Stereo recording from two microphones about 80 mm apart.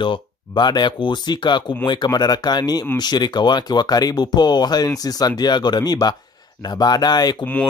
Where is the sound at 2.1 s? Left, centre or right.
Left.